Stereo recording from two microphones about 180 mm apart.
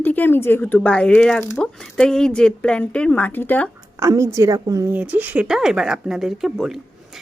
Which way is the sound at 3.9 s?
15° right (ahead or behind).